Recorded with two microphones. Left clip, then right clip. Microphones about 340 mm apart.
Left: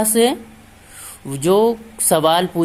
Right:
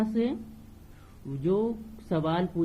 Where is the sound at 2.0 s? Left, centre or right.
Centre.